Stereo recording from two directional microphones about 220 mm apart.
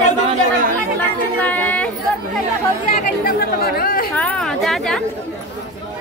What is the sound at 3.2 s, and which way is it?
Speech, 45° left (ahead or behind).